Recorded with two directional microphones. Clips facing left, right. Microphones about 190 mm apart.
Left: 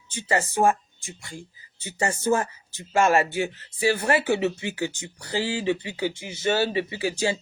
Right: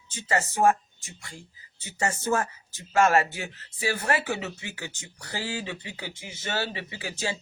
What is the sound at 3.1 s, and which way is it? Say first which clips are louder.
Music: left 3 dB; 30° left (ahead or behind).